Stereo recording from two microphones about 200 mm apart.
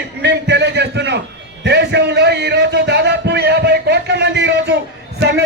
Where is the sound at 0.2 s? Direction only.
60° right (ahead or behind).